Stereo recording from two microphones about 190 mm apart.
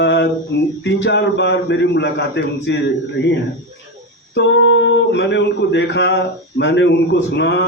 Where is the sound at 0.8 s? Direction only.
70° left (ahead or behind).